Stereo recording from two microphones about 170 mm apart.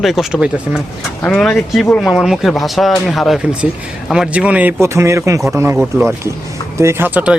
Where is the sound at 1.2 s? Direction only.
5° left (ahead or behind).